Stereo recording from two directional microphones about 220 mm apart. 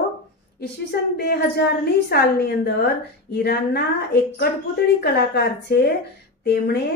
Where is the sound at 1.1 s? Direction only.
50° left (ahead or behind).